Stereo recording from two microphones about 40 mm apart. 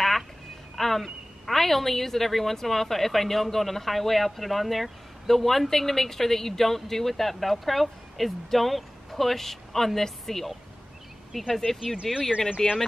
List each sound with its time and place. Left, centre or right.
0.7 s a sound: centre
1.4 s a woman's voice: centre
12.0 s speech: centre
12.6 s speech: centre